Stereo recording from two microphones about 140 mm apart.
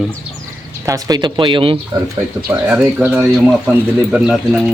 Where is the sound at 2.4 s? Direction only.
10° right (ahead or behind).